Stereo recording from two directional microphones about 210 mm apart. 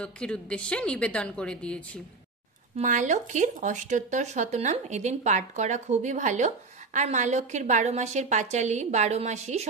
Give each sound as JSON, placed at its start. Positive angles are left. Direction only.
{"t": 0.0, "sound": "a woman's voice", "side_deg": 5}
{"t": 2.8, "sound": "speech", "side_deg": -35}